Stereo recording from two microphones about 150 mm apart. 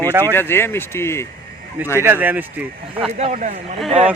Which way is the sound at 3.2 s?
50° right (ahead or behind).